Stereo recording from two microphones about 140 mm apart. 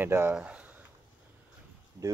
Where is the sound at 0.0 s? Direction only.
15° right (ahead or behind).